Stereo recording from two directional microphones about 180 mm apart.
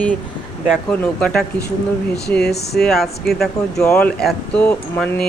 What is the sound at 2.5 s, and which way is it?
Speech, 65° left (ahead or behind).